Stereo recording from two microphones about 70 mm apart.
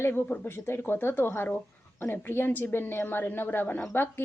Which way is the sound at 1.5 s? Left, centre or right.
Left.